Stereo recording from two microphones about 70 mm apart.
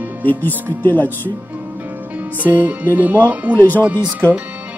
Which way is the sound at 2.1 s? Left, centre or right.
Right.